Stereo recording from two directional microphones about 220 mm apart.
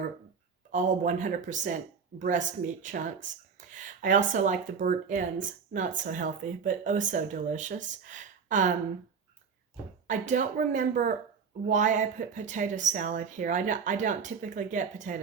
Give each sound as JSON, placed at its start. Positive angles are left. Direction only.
{"t": 0.7, "sound": "speech", "side_deg": -35}
{"t": 10.1, "sound": "speech", "side_deg": -35}